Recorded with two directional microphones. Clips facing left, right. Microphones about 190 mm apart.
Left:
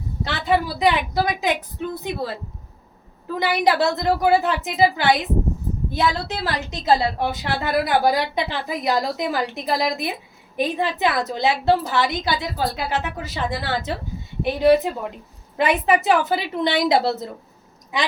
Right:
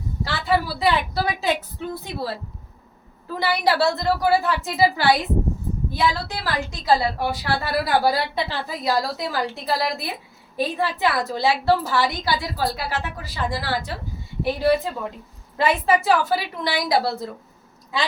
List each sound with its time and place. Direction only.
0.3 s a woman's voice: 20° left (ahead or behind)
3.3 s a woman's voice: 20° left (ahead or behind)